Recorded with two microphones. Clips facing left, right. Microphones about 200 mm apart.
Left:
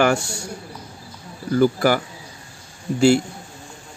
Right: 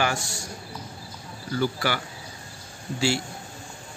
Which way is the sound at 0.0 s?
65° left (ahead or behind).